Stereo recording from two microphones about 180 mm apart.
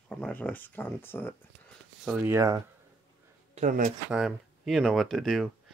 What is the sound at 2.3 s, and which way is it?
Speech, 15° right (ahead or behind).